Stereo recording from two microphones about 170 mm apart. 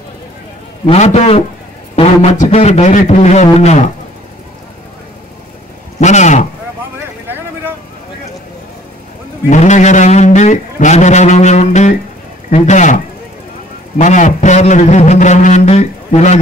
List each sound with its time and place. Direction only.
0.8 s a man's voice: 40° left (ahead or behind)
5.9 s speech: 45° left (ahead or behind)
9.5 s speech: 45° left (ahead or behind)